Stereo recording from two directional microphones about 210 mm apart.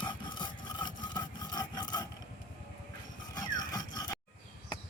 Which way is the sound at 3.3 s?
20° left (ahead or behind).